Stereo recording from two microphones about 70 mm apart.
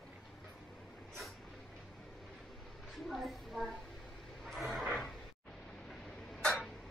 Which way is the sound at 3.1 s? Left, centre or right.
Centre.